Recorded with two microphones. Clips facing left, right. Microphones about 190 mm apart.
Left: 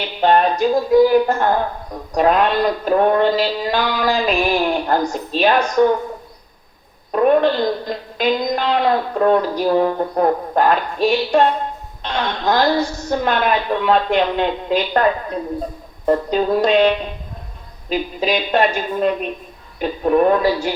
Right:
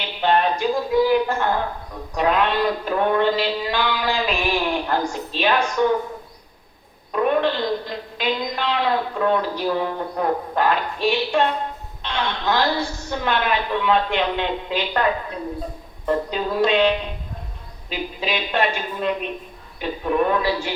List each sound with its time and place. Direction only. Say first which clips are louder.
0.2 s a woman's voice: left 5 dB; 40° left (ahead or behind)
7.1 s a woman's voice: left 5 dB; 45° left (ahead or behind)
16.0 s a woman's voice: left 6 dB; 45° left (ahead or behind)